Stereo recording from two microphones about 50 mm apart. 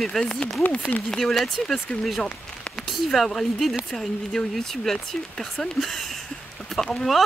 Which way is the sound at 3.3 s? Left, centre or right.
Centre.